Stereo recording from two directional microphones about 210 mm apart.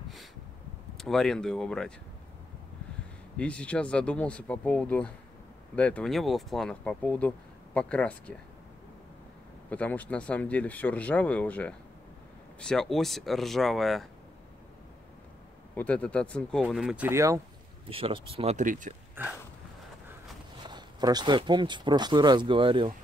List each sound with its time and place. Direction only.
0.9 s speech: centre (ahead or behind)
3.3 s speech: 5° left (ahead or behind)
9.7 s speech: 5° left (ahead or behind)
15.7 s speech: 5° left (ahead or behind); by 17.4 s 15° right (ahead or behind)
17.8 s speech: 25° right (ahead or behind)
19.2 s a sound: 10° right (ahead or behind)
20.6 s speech: 20° right (ahead or behind)